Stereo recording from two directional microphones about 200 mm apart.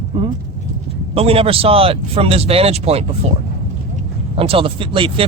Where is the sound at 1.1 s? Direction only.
30° right (ahead or behind).